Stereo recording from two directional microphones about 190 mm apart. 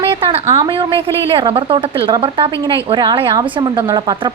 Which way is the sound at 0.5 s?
30° right (ahead or behind).